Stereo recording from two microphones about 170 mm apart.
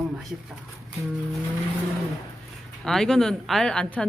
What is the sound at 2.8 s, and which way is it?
Speech, centre (ahead or behind).